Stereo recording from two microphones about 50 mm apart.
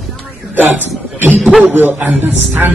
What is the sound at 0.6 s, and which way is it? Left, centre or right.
Speech, right.